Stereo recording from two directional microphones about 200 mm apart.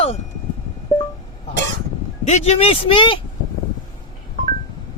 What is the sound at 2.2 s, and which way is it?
Speech, 30° left (ahead or behind).